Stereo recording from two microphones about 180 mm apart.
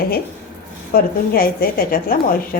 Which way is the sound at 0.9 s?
55° left (ahead or behind).